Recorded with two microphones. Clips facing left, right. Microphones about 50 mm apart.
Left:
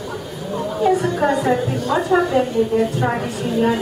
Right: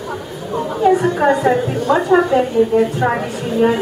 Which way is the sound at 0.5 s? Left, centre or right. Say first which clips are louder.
Right 4 dB; centre.